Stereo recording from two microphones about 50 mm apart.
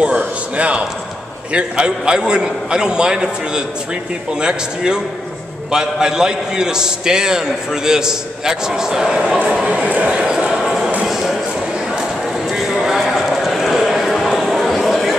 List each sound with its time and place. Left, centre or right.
0.0 s a man's voice: right
9.4 s a man's voice: right
10.5 s a sound: centre
12.4 s clip-clop: centre